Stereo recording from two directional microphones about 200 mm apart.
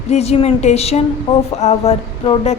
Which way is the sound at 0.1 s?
30° left (ahead or behind).